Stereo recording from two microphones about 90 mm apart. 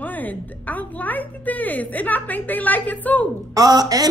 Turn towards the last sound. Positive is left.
turn(degrees=-45)  # may be behind; listen again after turning